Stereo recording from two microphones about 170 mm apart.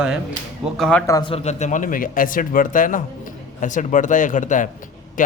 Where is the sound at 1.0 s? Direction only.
20° left (ahead or behind).